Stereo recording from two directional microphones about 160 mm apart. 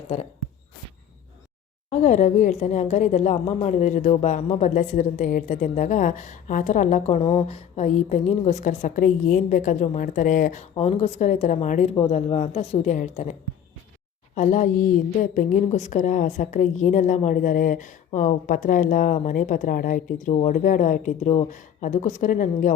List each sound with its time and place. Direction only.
0.1 s speech: 40° left (ahead or behind)
1.9 s a woman's voice: 50° left (ahead or behind)
14.3 s a woman's voice: 50° left (ahead or behind)